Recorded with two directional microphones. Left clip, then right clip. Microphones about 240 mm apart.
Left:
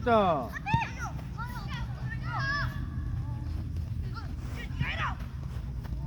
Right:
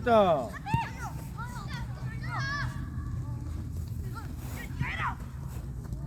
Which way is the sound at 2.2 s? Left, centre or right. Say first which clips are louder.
Left 2 dB; right.